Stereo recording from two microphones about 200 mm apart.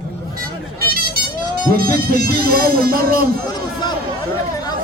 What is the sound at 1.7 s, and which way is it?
A man's voice, 45° right (ahead or behind).